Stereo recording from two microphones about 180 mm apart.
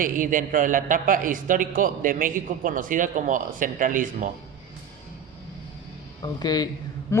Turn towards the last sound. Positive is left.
turn(degrees=15)  # may be behind; listen again after turning